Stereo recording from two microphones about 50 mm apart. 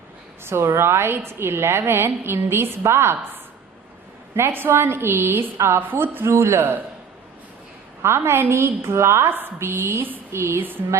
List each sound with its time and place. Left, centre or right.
0.4 s a woman's voice: right
5.8 s a woman's voice: right
8.0 s a woman's voice: right